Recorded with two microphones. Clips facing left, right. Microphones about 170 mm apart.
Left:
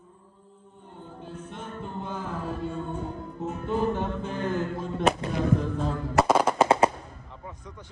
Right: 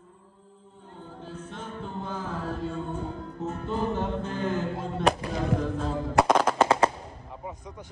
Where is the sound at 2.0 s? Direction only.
Centre (ahead or behind).